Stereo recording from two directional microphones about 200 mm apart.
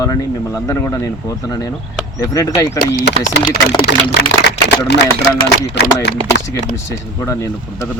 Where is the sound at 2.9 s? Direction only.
60° left (ahead or behind).